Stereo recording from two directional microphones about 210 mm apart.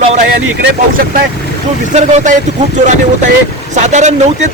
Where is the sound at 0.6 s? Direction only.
40° right (ahead or behind).